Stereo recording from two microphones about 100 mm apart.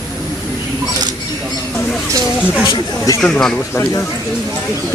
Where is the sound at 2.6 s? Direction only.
40° left (ahead or behind).